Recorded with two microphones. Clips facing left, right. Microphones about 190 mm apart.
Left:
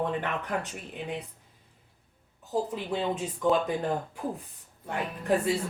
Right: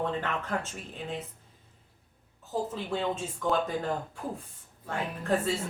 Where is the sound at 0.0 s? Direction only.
15° left (ahead or behind).